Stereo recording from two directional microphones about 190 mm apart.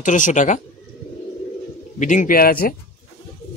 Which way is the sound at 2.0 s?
40° left (ahead or behind).